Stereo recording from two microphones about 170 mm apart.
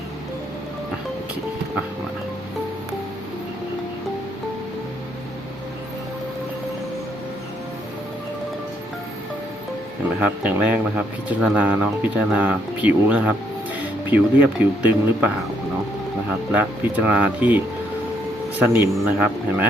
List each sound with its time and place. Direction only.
10.2 s speech: 5° right (ahead or behind)
16.5 s speech: 10° right (ahead or behind)
18.6 s speech: 10° right (ahead or behind)